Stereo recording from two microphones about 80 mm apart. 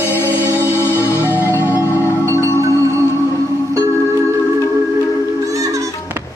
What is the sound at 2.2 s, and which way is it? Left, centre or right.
Marimba, right.